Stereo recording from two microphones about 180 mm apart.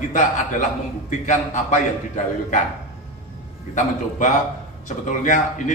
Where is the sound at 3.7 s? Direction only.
45° left (ahead or behind).